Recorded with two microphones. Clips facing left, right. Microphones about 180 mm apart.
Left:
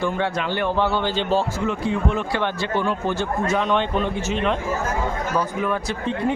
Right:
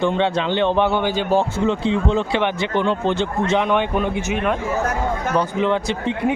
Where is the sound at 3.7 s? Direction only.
10° right (ahead or behind).